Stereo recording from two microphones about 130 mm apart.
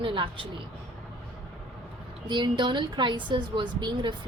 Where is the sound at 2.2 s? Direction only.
35° right (ahead or behind).